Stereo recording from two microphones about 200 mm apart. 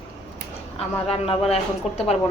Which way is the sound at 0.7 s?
30° left (ahead or behind).